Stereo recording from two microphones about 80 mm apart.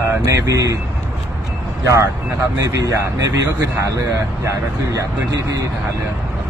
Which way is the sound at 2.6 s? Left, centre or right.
Right.